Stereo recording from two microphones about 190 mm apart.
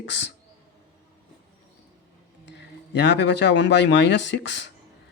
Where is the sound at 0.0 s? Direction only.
70° left (ahead or behind).